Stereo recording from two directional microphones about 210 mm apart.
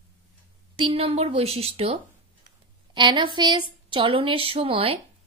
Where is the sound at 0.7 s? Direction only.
25° right (ahead or behind).